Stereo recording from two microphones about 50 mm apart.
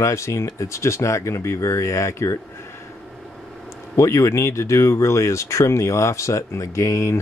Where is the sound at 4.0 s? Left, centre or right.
Left.